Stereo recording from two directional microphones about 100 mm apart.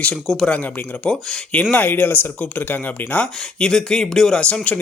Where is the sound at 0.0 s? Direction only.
5° left (ahead or behind).